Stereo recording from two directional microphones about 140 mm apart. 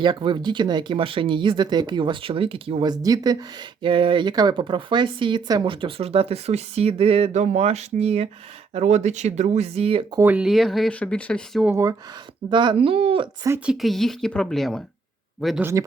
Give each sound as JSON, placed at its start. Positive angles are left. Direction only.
{"t": 0.0, "sound": "speech", "side_deg": -35}
{"t": 2.9, "sound": "speech", "side_deg": -25}
{"t": 3.8, "sound": "speech", "side_deg": -40}
{"t": 10.2, "sound": "speech", "side_deg": -15}
{"t": 10.4, "sound": "speech", "side_deg": 0}
{"t": 12.5, "sound": "speech", "side_deg": -35}
{"t": 13.7, "sound": "speech", "side_deg": 0}